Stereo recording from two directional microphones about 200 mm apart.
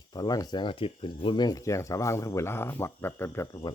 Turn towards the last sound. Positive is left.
turn(degrees=15)  # may be behind; listen again after turning